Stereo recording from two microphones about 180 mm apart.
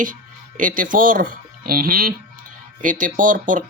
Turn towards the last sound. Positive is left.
turn(degrees=-45)  # may be behind; listen again after turning